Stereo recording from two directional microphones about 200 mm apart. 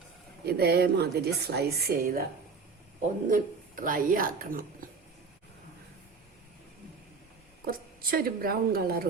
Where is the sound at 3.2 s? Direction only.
40° right (ahead or behind).